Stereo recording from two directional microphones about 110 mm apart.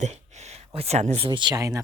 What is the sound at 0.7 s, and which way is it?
Speech, 75° right (ahead or behind).